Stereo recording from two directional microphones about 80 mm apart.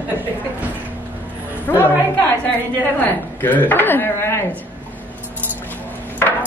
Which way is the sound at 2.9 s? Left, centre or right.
Left.